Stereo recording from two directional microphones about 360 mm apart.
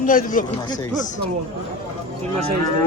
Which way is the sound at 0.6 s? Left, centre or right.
Centre.